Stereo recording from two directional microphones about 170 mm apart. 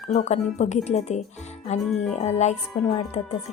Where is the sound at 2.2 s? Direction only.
40° left (ahead or behind).